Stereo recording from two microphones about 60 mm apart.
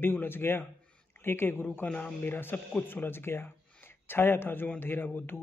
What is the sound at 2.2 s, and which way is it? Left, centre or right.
Speech, left.